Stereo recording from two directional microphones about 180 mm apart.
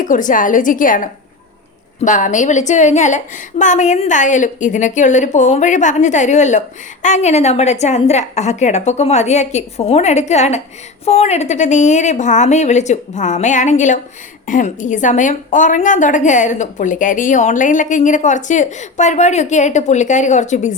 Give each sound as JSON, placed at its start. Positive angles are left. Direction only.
{"t": 0.0, "sound": "a woman's voice", "side_deg": 45}